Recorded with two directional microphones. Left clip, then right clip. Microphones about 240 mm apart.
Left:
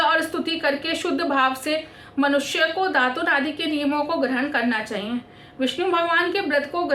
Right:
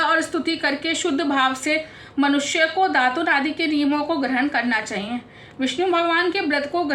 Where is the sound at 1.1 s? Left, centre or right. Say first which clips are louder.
Left 1 dB; centre.